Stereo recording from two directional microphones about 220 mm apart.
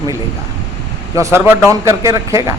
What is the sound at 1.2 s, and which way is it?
A man's voice, 10° right (ahead or behind).